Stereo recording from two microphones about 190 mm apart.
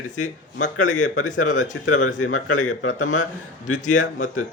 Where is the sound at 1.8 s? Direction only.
90° left.